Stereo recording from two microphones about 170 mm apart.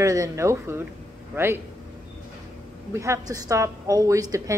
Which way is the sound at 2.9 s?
15° right (ahead or behind).